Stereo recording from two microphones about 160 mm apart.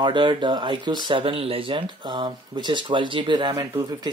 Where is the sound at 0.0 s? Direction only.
30° right (ahead or behind).